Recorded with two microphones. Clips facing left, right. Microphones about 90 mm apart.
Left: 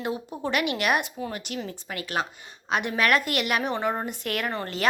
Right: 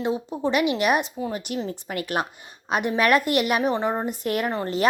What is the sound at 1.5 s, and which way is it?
Speech, 30° right (ahead or behind).